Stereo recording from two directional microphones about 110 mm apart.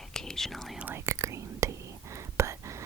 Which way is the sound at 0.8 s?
20° right (ahead or behind).